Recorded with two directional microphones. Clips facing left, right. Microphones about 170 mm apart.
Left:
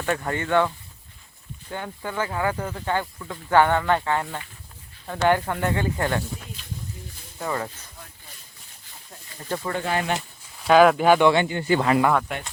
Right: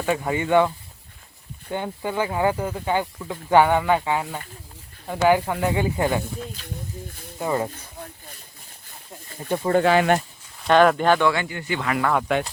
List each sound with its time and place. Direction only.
0.0 s speech: 10° right (ahead or behind)
1.7 s speech: 20° right (ahead or behind)
7.3 s speech: 20° right (ahead or behind)
9.8 s speech: 90° right
10.6 s speech: 5° left (ahead or behind)
11.3 s speech: 25° left (ahead or behind)
11.7 s speech: 35° left (ahead or behind)
12.3 s speech: 90° right